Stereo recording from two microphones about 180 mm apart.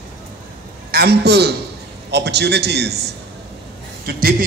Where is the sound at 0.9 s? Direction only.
65° right (ahead or behind).